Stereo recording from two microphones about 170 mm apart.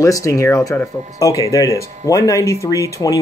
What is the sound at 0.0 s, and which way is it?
Speech, 20° left (ahead or behind).